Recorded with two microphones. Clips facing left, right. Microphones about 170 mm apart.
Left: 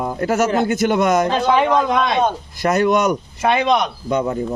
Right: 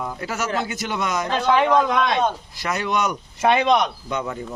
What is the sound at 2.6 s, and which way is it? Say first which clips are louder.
Speech: left 8 dB; 45° left (ahead or behind).